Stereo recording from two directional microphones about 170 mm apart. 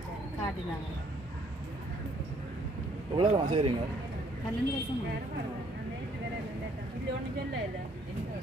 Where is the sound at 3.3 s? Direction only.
35° right (ahead or behind).